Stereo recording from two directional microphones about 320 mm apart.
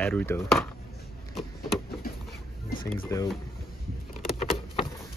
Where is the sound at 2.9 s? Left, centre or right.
Centre.